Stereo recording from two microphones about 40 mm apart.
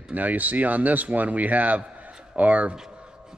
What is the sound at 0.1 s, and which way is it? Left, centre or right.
A man's voice, right.